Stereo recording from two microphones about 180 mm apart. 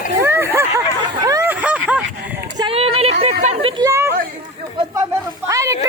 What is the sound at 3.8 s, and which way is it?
Chatter, 15° right (ahead or behind).